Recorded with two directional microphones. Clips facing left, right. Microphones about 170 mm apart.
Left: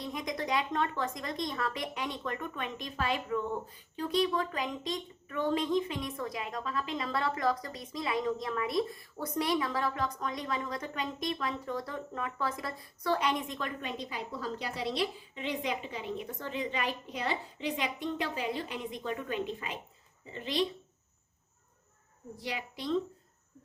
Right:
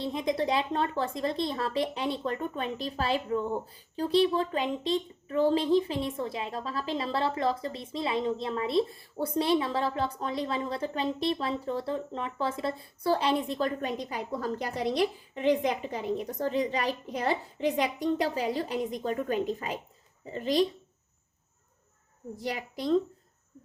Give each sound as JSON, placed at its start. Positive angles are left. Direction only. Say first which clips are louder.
{"t": 0.0, "sound": "a woman's voice", "louder": "right 7 dB", "side_deg": -30}
{"t": 22.4, "sound": "a woman's voice", "louder": "right 5 dB", "side_deg": -45}